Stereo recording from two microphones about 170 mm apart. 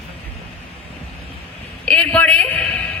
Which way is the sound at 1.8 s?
5° left (ahead or behind).